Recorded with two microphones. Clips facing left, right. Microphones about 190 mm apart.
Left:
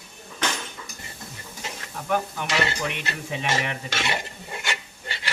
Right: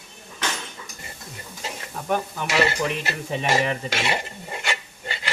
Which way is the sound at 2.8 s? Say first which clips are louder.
Right 4 dB; 35° right (ahead or behind).